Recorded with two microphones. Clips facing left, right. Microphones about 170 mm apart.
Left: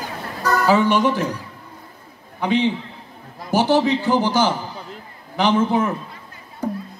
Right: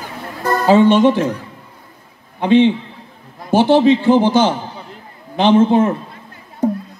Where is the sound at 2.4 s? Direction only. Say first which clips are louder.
Right 8 dB; 25° right (ahead or behind).